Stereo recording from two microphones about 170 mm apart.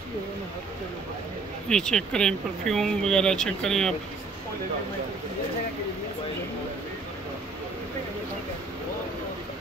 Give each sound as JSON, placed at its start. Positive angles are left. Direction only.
{"t": 1.7, "sound": "speech", "side_deg": 5}